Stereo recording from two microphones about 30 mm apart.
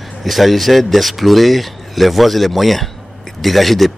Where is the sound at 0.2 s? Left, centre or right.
Centre.